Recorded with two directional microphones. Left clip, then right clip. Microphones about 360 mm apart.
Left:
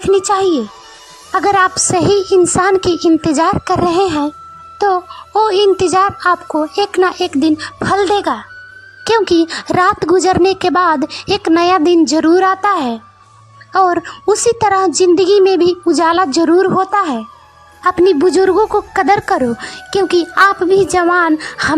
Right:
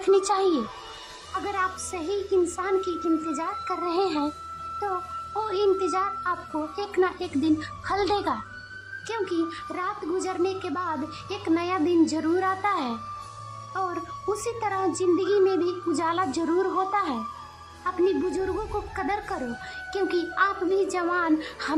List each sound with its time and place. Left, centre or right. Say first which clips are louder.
0.1 s speech: left 10 dB; centre